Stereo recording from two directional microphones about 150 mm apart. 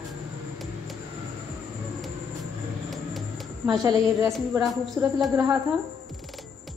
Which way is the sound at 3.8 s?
25° right (ahead or behind).